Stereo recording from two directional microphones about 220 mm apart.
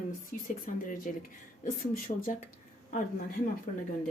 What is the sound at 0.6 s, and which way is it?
Speech, 40° left (ahead or behind).